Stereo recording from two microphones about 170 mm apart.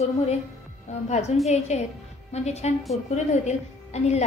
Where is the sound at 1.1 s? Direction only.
40° left (ahead or behind).